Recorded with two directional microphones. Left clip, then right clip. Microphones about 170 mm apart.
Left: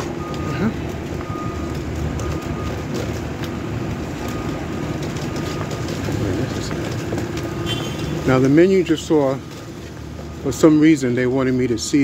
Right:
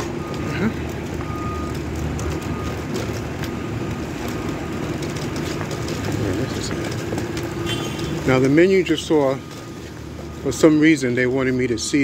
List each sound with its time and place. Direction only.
8.3 s speech: 20° left (ahead or behind)
10.6 s speech: 25° left (ahead or behind)